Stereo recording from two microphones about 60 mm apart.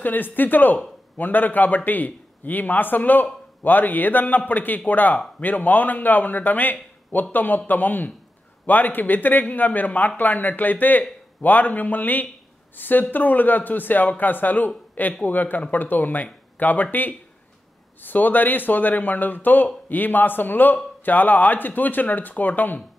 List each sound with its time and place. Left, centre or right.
0.0 s a man's voice: left